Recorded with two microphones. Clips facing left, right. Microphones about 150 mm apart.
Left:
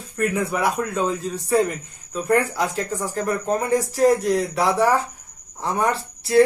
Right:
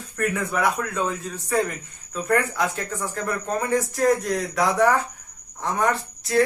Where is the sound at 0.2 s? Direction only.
20° left (ahead or behind).